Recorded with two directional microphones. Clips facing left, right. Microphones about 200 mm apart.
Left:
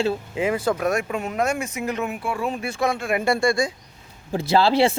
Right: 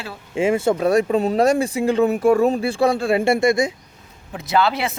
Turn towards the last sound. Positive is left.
turn(degrees=30)  # may be behind; listen again after turning